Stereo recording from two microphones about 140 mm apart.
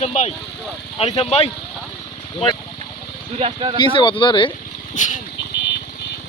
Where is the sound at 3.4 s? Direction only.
40° right (ahead or behind).